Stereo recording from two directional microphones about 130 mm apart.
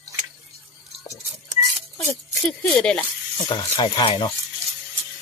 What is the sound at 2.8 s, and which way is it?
Speech, 5° left (ahead or behind).